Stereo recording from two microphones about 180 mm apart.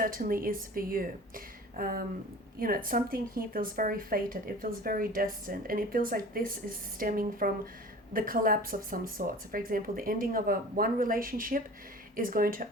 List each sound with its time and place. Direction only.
0.0 s a woman's voice: 55° right (ahead or behind)